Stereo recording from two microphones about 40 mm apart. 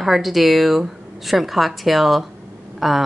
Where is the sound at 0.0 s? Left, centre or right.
Centre.